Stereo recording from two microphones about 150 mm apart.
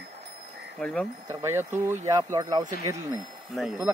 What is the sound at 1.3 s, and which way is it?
Speech, 15° right (ahead or behind).